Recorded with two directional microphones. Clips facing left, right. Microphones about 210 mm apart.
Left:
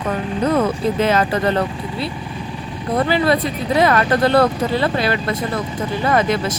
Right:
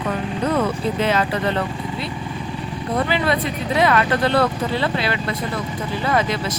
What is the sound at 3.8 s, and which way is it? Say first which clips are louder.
Speech: left 2 dB; 40° left (ahead or behind).